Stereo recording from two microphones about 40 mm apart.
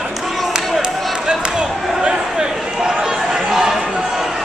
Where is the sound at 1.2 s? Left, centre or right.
Centre.